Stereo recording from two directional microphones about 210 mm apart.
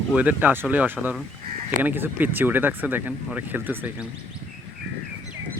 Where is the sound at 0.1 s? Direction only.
10° right (ahead or behind).